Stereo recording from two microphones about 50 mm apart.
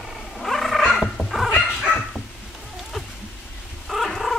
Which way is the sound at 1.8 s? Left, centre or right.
Centre.